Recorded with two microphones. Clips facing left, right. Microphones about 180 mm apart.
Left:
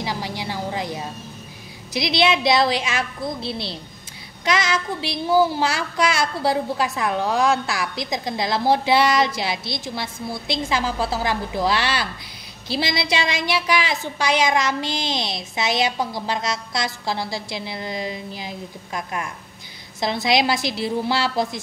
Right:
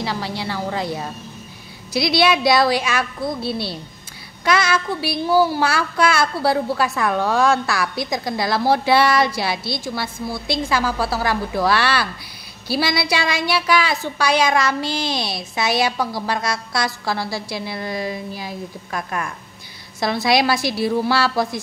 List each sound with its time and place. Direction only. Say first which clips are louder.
0.0 s a woman's voice: right 2 dB; 15° left (ahead or behind)
2.0 s a woman's voice: right 2 dB; 20° left (ahead or behind)
20.0 s a woman's voice: right 2 dB; 20° left (ahead or behind)